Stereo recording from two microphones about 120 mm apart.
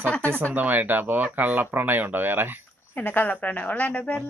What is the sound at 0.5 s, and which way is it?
Speech, 15° right (ahead or behind).